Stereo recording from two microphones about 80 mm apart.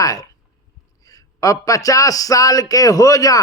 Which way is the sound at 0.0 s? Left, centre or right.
Left.